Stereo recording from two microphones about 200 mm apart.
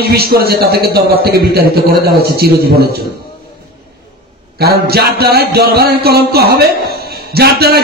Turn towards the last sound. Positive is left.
turn(degrees=-50)  # may be behind; listen again after turning